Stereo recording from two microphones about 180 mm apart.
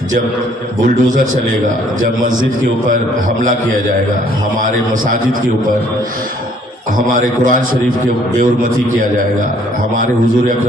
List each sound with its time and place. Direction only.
7.2 s a man's voice: 50° right (ahead or behind)